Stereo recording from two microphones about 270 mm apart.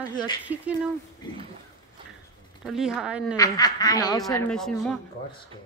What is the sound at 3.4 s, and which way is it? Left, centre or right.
Speech, centre.